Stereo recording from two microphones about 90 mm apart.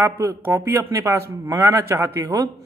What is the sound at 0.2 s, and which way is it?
A man's voice, 25° right (ahead or behind).